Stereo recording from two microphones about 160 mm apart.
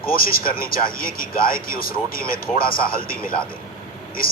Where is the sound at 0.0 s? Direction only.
65° left (ahead or behind).